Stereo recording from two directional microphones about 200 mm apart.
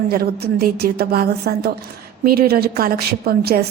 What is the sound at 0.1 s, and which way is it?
A woman's voice, 50° right (ahead or behind).